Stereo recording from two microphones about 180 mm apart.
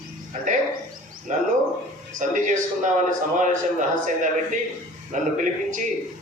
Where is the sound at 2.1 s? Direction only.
45° right (ahead or behind).